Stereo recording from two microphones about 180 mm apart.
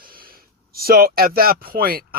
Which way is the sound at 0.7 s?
55° right (ahead or behind).